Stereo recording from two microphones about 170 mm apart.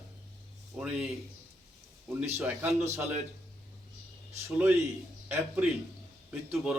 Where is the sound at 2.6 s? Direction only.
15° right (ahead or behind).